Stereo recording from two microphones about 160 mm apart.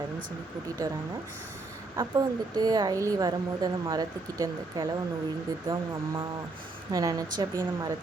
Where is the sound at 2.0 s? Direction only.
25° right (ahead or behind).